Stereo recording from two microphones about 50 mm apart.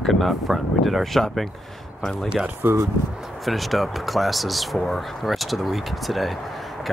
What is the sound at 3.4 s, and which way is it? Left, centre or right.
Speech, centre.